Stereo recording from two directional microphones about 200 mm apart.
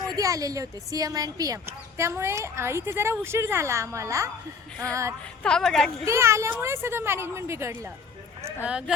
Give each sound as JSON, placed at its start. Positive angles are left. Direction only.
{"t": 0.0, "sound": "a woman's voice", "side_deg": -15}
{"t": 5.4, "sound": "a woman's voice", "side_deg": 5}
{"t": 6.1, "sound": "a woman's voice", "side_deg": -15}